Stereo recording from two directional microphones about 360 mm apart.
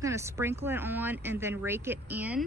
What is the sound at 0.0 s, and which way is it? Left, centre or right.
A woman's voice, centre.